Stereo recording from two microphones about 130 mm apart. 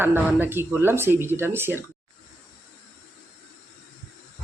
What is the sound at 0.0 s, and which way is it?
Speech, 15° right (ahead or behind).